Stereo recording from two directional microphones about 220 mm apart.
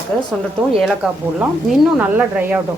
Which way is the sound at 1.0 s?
Centre (ahead or behind).